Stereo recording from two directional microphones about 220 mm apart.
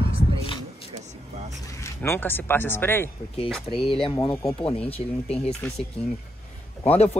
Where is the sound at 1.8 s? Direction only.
10° left (ahead or behind).